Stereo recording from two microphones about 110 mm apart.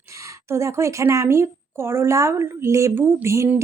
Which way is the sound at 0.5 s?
25° right (ahead or behind).